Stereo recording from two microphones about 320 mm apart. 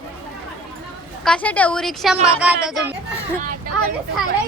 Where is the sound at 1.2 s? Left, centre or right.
Centre.